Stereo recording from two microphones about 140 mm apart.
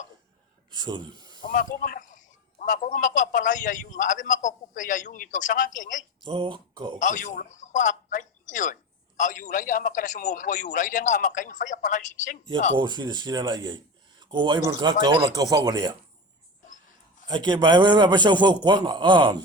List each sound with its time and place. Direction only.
0.8 s speech: 30° right (ahead or behind)
1.5 s speech: 90° left
2.6 s a man's voice: 60° left (ahead or behind)
6.2 s speech: 35° right (ahead or behind)
7.0 s a man's voice: 65° left (ahead or behind)
12.7 s speech: 35° right (ahead or behind)
15.4 s speech: 25° right (ahead or behind)
17.2 s speech: 30° right (ahead or behind)